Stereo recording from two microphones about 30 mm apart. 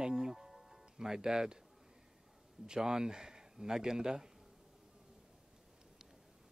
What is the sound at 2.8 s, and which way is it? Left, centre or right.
Speech, centre.